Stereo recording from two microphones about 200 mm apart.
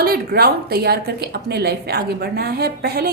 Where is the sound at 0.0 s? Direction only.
50° right (ahead or behind).